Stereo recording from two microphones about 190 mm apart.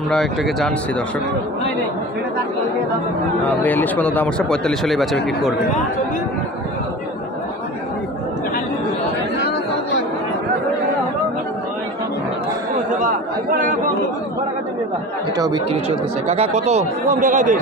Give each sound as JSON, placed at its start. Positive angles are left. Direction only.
{"t": 0.1, "sound": "speech", "side_deg": 0}
{"t": 3.6, "sound": "speech", "side_deg": 10}
{"t": 12.9, "sound": "chatter", "side_deg": -45}
{"t": 15.3, "sound": "speech", "side_deg": -20}
{"t": 16.3, "sound": "speech", "side_deg": -35}